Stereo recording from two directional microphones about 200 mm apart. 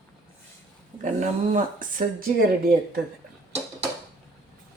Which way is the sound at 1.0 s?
40° right (ahead or behind).